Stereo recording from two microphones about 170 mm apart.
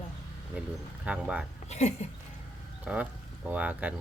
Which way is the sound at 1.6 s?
40° left (ahead or behind).